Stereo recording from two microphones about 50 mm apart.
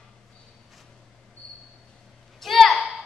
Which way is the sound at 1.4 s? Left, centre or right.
Centre.